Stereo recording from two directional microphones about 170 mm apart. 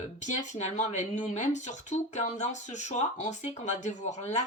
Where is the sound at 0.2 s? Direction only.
45° left (ahead or behind).